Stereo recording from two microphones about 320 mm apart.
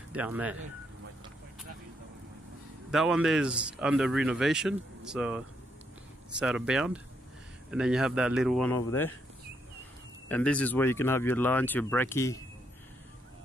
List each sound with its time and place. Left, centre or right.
0.1 s speech: centre
2.9 s speech: centre
10.2 s speech: centre